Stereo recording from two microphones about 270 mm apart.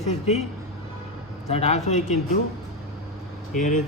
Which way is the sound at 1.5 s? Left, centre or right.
Left.